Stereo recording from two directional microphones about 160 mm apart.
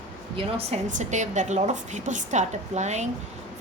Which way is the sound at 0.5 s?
50° right (ahead or behind).